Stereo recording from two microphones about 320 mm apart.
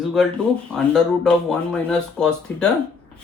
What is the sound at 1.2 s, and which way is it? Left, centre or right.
Speech, centre.